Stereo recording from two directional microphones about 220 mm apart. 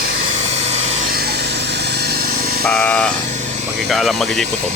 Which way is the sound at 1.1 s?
45° right (ahead or behind).